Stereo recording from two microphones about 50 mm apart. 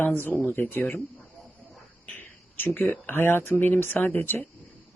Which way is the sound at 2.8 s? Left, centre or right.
Left.